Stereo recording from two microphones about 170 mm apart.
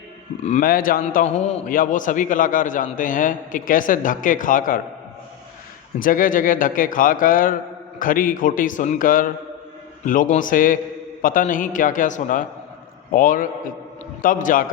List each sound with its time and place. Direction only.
0.4 s a man's voice: 50° left (ahead or behind)
1.2 s a man's voice: 45° left (ahead or behind)
6.0 s a man's voice: 55° left (ahead or behind)